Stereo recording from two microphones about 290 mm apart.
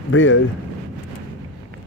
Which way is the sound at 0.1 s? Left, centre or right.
Left.